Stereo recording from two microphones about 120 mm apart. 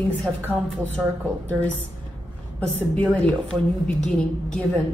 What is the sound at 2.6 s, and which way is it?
A woman's voice, 10° left (ahead or behind).